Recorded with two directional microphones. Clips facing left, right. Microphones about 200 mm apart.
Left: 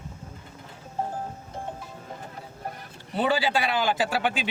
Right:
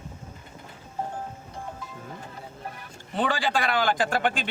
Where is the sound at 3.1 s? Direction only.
5° left (ahead or behind).